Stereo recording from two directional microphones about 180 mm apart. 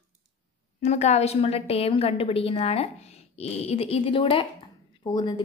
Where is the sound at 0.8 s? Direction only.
40° left (ahead or behind).